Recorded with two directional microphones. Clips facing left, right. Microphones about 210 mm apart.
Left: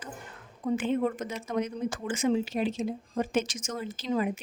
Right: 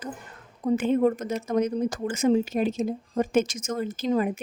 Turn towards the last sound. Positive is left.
turn(degrees=-45)  # may be behind; listen again after turning